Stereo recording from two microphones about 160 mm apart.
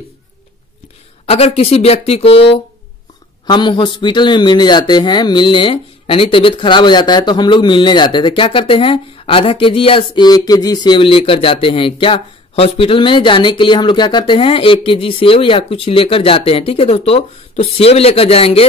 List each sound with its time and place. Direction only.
1.3 s a man's voice: 40° left (ahead or behind)